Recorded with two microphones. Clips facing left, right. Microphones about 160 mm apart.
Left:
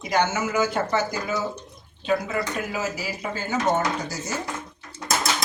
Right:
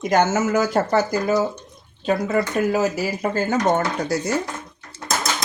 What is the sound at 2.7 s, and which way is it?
Speech, 45° right (ahead or behind).